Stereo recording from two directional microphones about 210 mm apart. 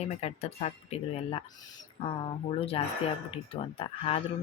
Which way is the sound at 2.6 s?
25° left (ahead or behind).